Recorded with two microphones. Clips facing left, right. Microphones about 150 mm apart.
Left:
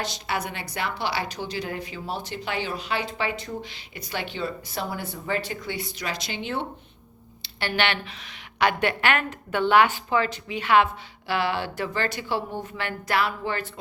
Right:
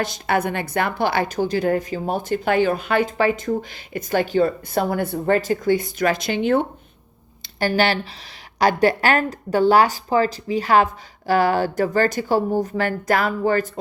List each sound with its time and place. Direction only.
0.0 s a woman's voice: 50° right (ahead or behind)
7.4 s a woman's voice: 40° right (ahead or behind)